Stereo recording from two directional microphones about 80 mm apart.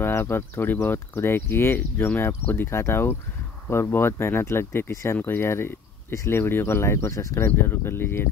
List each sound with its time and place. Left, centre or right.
0.0 s speech: left